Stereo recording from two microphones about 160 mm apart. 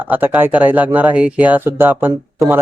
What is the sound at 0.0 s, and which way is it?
A man's voice, 10° right (ahead or behind).